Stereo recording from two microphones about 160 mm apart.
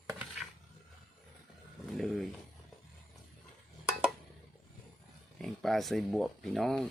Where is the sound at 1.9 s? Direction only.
Centre (ahead or behind).